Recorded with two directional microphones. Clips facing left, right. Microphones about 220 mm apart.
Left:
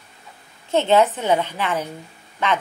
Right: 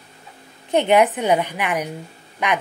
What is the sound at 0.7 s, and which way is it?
A woman's voice, 15° right (ahead or behind).